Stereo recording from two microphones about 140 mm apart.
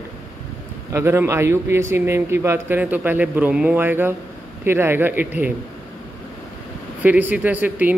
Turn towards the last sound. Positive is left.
turn(degrees=-10)  # may be behind; listen again after turning